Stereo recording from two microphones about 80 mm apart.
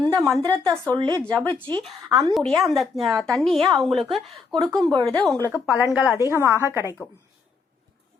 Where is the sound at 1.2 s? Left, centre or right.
Centre.